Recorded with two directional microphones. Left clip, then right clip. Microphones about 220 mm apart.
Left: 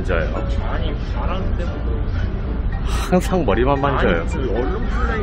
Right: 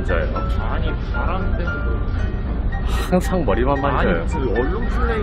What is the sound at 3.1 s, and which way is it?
Speech, 20° left (ahead or behind).